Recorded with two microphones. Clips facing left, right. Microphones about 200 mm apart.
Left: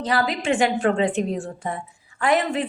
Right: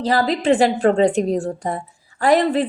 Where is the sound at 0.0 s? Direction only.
35° right (ahead or behind).